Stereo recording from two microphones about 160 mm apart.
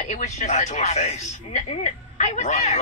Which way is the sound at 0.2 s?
45° left (ahead or behind).